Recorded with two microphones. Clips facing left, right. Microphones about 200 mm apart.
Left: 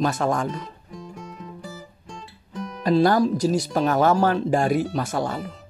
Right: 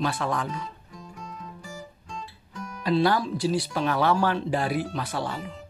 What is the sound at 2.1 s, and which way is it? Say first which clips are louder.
Guitar: left 4 dB; 30° left (ahead or behind).